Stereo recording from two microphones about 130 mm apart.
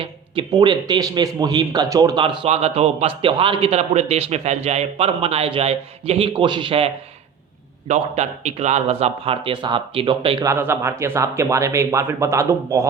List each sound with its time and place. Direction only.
0.0 s speech: 40° right (ahead or behind)
7.9 s speech: 60° right (ahead or behind); by 10.4 s 40° right (ahead or behind)
10.4 s speech: 20° right (ahead or behind)